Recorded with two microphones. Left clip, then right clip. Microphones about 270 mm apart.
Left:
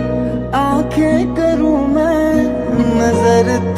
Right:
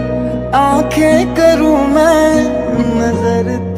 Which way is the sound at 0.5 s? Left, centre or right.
Centre.